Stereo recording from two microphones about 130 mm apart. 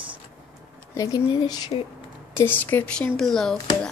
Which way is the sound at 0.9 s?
25° left (ahead or behind).